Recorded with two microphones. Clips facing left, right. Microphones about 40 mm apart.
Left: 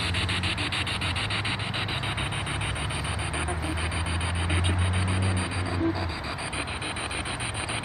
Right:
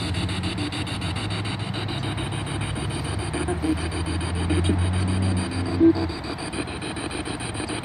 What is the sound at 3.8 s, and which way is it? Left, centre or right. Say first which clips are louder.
Vehicle: right 2 dB; centre.